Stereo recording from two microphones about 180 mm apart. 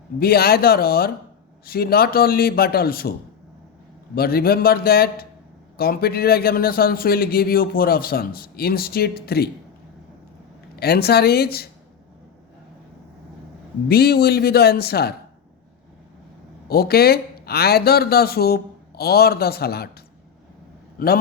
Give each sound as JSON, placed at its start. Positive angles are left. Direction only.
{"t": 0.2, "sound": "a man's voice", "side_deg": 60}
{"t": 10.8, "sound": "a man's voice", "side_deg": 60}
{"t": 13.8, "sound": "a man's voice", "side_deg": 60}
{"t": 16.6, "sound": "a man's voice", "side_deg": 60}
{"t": 21.0, "sound": "a man's voice", "side_deg": 55}